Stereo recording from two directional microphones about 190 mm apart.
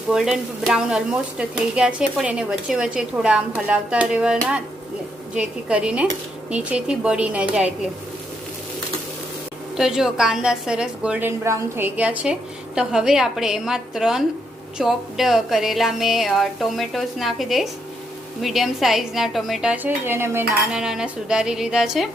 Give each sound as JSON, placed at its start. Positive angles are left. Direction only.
{"t": 0.1, "sound": "speech", "side_deg": -5}
{"t": 9.7, "sound": "speech", "side_deg": -5}